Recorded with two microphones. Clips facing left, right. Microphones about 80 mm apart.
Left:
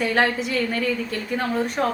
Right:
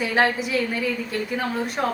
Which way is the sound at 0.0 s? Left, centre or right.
Centre.